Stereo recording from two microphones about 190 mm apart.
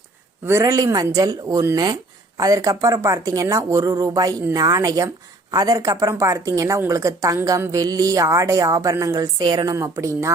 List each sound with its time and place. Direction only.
0.4 s speech: 15° right (ahead or behind)